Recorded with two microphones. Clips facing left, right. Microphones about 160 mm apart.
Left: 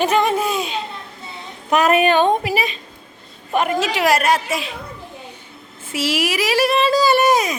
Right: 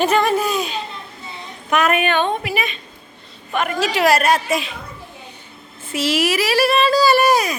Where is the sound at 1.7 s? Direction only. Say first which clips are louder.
Left 3 dB; 35° left (ahead or behind).